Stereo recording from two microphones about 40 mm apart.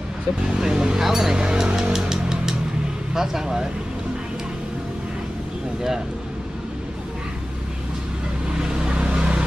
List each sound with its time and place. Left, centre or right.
0.6 s speech: centre
1.8 s music: centre
3.2 s speech: centre
8.5 s vehicle: right